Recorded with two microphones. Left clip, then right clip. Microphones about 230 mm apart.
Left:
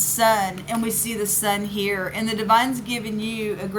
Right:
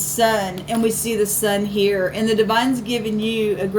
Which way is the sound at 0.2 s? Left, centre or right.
Left.